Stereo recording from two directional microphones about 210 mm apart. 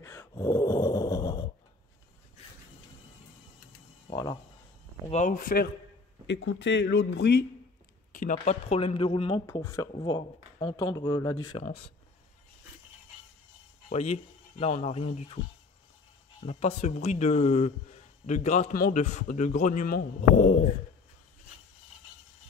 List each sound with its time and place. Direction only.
0.0 s snoring: 15° left (ahead or behind)
4.1 s music: 15° left (ahead or behind)
5.1 s speech: 35° left (ahead or behind)
6.2 s a man's voice: 60° left (ahead or behind)
8.1 s speech: 40° left (ahead or behind); by 11.6 s 20° left (ahead or behind)
11.6 s speech: 30° left (ahead or behind)
13.8 s speech: 30° left (ahead or behind)
16.4 s speech: 30° left (ahead or behind)